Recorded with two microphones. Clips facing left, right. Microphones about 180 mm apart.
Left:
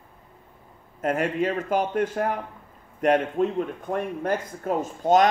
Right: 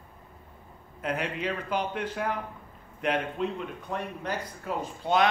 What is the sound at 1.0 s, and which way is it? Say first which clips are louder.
Speech: left 7 dB; 45° left (ahead or behind).